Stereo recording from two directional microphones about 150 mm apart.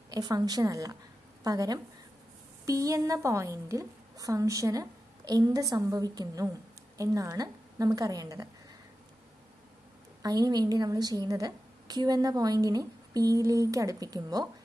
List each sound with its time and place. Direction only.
0.1 s a woman's voice: 25° right (ahead or behind)
10.2 s a woman's voice: 25° right (ahead or behind)